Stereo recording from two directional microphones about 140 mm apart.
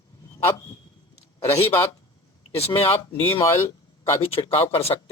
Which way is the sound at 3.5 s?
20° left (ahead or behind).